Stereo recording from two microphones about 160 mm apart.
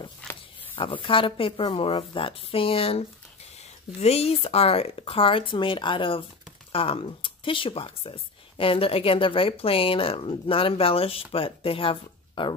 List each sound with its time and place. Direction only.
0.7 s speech: 30° left (ahead or behind)